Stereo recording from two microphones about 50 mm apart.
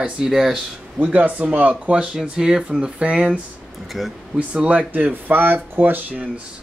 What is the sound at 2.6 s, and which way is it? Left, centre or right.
Speech, right.